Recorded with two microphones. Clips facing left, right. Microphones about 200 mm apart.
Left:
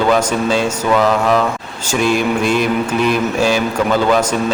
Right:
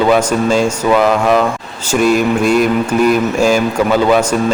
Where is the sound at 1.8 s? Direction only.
5° right (ahead or behind).